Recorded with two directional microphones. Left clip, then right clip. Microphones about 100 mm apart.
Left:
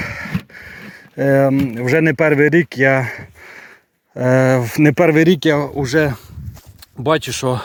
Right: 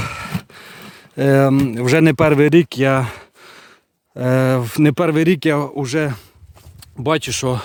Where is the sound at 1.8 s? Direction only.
80° right; by 3.2 s 50° right (ahead or behind).